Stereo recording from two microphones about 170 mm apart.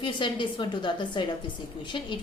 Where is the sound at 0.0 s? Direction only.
30° left (ahead or behind).